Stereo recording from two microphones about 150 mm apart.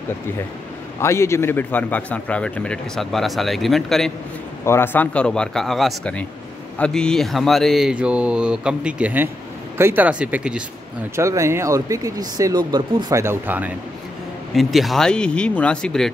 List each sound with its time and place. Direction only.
1.0 s a man's voice: 20° left (ahead or behind); by 4.1 s centre (ahead or behind)
4.6 s a man's voice: 15° left (ahead or behind); by 10.6 s 5° right (ahead or behind)
11.1 s speech: 20° right (ahead or behind)
13.2 s speech: 15° right (ahead or behind)
14.5 s speech: centre (ahead or behind)